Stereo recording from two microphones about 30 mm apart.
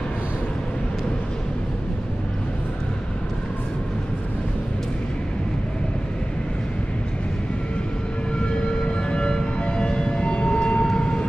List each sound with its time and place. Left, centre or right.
8.6 s civil defense siren: left
9.7 s siren: left
10.9 s vehicle: left